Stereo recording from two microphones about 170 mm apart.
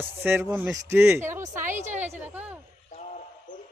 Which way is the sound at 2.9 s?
45° left (ahead or behind).